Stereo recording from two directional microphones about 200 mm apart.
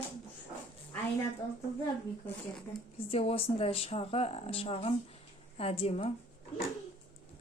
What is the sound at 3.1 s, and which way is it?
A woman's voice, 30° left (ahead or behind).